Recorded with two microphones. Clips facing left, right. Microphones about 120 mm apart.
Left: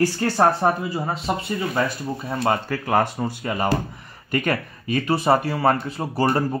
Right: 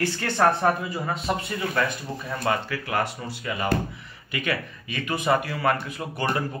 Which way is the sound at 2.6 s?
50° left (ahead or behind).